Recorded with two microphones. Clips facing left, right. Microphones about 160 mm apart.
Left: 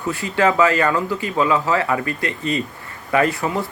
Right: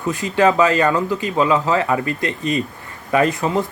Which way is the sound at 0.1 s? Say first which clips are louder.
Right 2 dB; 20° right (ahead or behind).